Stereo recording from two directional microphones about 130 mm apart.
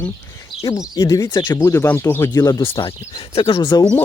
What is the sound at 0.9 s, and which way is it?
Speech, 25° left (ahead or behind).